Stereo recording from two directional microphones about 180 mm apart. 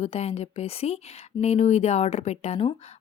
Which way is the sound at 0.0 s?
35° left (ahead or behind).